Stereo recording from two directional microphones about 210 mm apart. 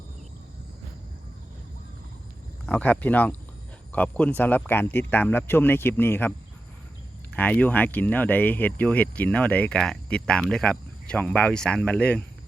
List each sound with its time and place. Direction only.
2.6 s speech: 10° left (ahead or behind)
7.3 s speech: 10° left (ahead or behind)